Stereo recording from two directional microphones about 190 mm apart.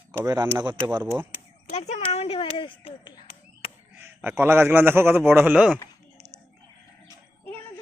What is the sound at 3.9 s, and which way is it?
A man's voice, 10° right (ahead or behind).